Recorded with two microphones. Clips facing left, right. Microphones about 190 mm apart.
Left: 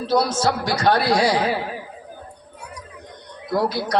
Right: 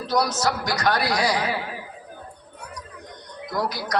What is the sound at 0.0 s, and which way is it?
A man's voice, 30° left (ahead or behind).